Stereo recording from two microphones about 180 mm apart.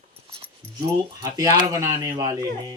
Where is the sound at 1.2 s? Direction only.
20° right (ahead or behind).